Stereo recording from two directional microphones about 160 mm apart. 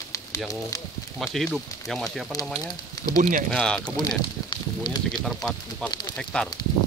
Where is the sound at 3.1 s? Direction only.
55° right (ahead or behind).